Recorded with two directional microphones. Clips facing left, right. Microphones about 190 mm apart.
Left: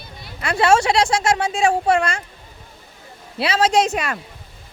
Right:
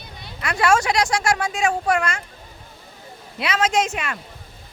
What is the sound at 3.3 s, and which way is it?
Speech, 30° left (ahead or behind).